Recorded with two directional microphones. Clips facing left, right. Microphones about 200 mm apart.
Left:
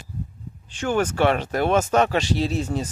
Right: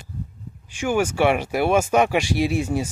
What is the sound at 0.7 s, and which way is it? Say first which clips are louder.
Speech: right 1 dB; 10° right (ahead or behind).